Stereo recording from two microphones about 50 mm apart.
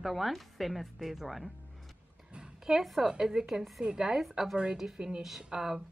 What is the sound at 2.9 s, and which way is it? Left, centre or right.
Speech, centre.